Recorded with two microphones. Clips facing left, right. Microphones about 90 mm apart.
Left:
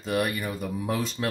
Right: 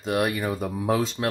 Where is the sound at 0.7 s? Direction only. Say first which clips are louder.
Right 5 dB; 90° right.